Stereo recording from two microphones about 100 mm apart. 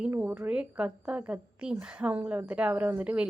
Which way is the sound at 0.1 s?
15° right (ahead or behind).